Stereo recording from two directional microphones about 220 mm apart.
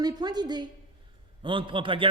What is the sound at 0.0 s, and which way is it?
A man's voice, 20° right (ahead or behind).